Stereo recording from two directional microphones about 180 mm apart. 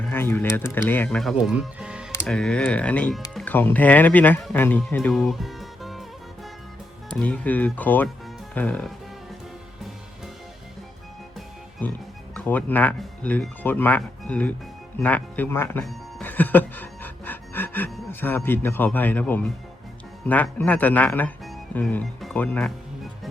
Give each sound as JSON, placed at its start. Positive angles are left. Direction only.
{"t": 0.1, "sound": "speech", "side_deg": 10}
{"t": 4.6, "sound": "music", "side_deg": 10}
{"t": 7.2, "sound": "speech", "side_deg": 5}
{"t": 12.3, "sound": "speech", "side_deg": 10}
{"t": 15.8, "sound": "music", "side_deg": 0}
{"t": 18.1, "sound": "speech", "side_deg": 10}